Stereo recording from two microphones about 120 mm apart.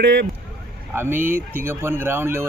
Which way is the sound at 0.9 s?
20° right (ahead or behind).